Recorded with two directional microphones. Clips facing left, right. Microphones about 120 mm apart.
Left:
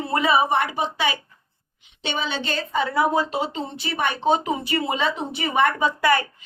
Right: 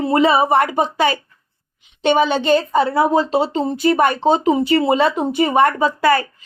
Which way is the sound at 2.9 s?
30° right (ahead or behind).